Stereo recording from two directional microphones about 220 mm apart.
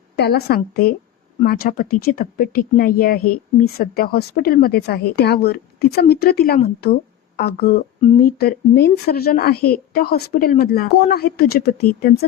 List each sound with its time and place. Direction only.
0.2 s speech: 45° left (ahead or behind)